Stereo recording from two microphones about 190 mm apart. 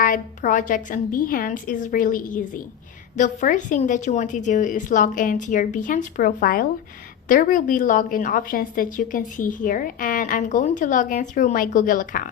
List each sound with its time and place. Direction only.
0.0 s a woman's voice: 45° left (ahead or behind)